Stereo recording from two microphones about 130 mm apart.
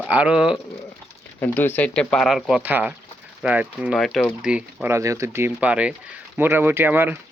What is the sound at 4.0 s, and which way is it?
Speech, centre (ahead or behind).